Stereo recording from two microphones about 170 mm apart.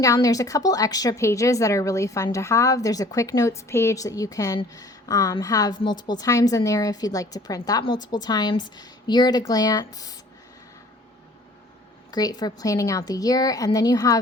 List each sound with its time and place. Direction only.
0.0 s a woman's voice: 20° left (ahead or behind)
12.1 s a woman's voice: 25° left (ahead or behind)